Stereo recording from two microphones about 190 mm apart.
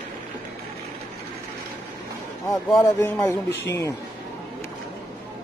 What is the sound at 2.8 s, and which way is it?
Speech, 15° left (ahead or behind).